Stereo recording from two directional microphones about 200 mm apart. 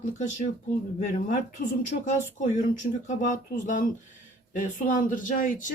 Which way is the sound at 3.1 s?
40° left (ahead or behind).